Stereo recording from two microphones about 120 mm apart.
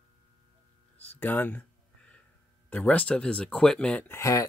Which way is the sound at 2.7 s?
10° left (ahead or behind).